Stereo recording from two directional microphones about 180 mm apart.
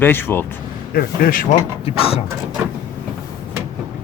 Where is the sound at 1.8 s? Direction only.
30° left (ahead or behind).